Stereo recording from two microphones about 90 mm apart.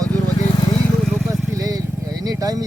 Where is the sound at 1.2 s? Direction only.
40° right (ahead or behind).